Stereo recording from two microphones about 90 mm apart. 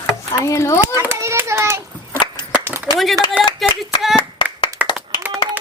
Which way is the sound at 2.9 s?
55° left (ahead or behind).